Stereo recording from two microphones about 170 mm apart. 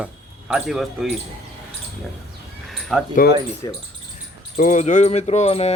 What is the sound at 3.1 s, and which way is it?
Speech, 65° left (ahead or behind).